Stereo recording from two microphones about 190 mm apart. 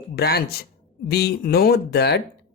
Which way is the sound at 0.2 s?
55° left (ahead or behind).